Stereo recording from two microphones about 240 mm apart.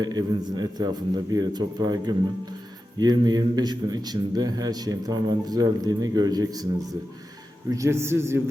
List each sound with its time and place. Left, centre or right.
0.0 s a man's voice: centre
7.7 s a man's voice: centre